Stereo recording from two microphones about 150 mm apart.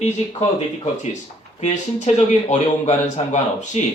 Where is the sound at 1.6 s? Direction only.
50° left (ahead or behind).